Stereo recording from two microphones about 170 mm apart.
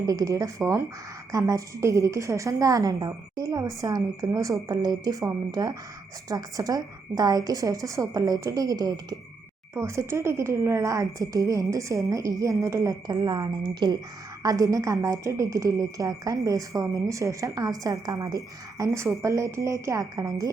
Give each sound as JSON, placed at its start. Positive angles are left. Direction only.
{"t": 0.0, "sound": "a woman's voice", "side_deg": -20}